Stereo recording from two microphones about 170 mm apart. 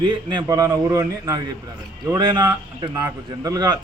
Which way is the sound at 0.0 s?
25° right (ahead or behind).